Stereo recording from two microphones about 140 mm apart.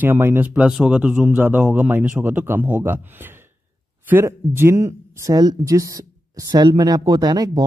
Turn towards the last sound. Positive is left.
turn(degrees=-25)  # may be behind; listen again after turning